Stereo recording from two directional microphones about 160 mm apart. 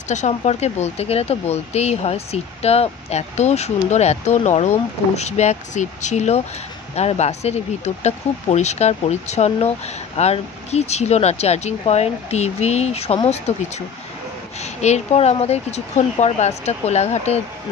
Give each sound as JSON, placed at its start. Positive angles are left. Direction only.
{"t": 0.1, "sound": "speech", "side_deg": 45}